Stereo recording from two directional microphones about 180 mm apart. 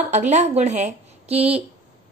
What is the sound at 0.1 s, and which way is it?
A woman's voice, 40° right (ahead or behind).